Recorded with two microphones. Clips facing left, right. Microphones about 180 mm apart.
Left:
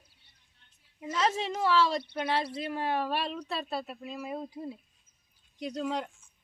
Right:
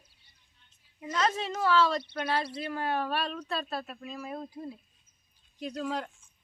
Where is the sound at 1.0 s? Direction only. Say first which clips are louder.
Even; 10° left (ahead or behind).